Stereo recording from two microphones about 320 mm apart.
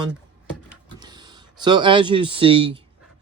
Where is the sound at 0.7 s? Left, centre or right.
Centre.